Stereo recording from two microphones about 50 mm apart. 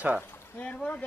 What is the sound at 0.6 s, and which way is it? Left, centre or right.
Speech, left.